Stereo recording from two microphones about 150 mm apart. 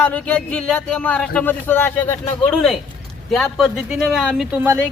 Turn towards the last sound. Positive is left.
turn(degrees=-10)  # may be behind; listen again after turning